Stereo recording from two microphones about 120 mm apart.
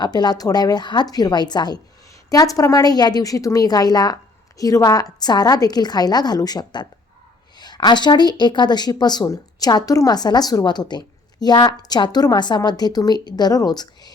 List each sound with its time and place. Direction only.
0.0 s speech: 35° left (ahead or behind)